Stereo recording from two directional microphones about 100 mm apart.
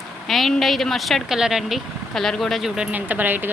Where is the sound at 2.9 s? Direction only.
15° right (ahead or behind).